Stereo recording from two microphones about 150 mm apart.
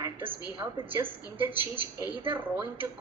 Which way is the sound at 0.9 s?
15° right (ahead or behind).